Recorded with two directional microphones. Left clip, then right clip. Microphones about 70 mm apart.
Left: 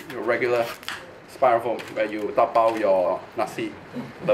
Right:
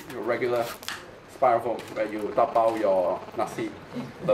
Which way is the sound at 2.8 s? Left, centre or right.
Centre.